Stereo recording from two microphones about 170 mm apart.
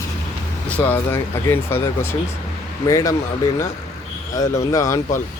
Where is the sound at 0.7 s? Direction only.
10° left (ahead or behind).